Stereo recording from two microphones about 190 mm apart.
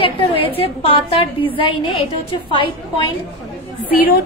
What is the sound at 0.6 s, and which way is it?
A woman's voice, 30° left (ahead or behind).